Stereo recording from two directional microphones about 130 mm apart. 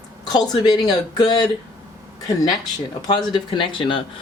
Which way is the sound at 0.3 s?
30° left (ahead or behind).